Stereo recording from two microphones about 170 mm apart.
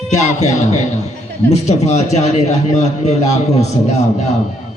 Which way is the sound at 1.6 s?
40° left (ahead or behind).